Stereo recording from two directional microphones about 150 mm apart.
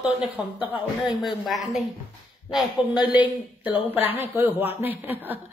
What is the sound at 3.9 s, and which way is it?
Speech, 10° right (ahead or behind).